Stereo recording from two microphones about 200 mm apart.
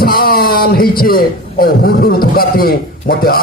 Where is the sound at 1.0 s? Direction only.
45° left (ahead or behind).